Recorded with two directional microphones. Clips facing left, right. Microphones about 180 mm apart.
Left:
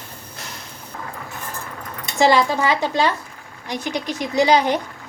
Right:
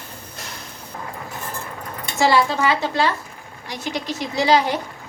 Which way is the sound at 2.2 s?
15° left (ahead or behind).